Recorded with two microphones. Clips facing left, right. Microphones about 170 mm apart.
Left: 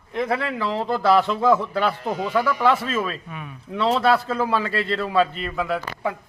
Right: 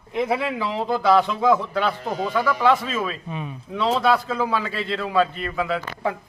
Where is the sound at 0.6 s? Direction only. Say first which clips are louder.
Even; centre (ahead or behind).